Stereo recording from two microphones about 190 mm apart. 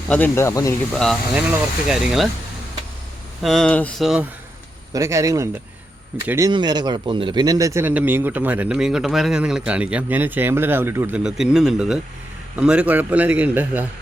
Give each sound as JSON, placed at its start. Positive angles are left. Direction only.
{"t": 0.1, "sound": "speech", "side_deg": 10}
{"t": 0.9, "sound": "speech", "side_deg": 0}
{"t": 3.4, "sound": "speech", "side_deg": 0}
{"t": 4.9, "sound": "speech", "side_deg": -15}